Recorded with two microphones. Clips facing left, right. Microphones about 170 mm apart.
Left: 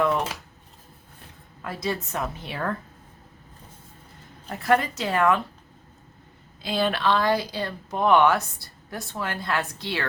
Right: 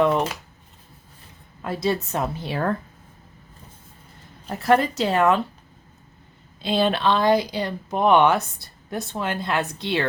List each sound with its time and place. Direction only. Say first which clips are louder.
1.6 s a woman's voice: right 5 dB; 25° right (ahead or behind)
4.4 s speech: right 3 dB; 30° right (ahead or behind)
6.6 s speech: right 4 dB; 25° right (ahead or behind)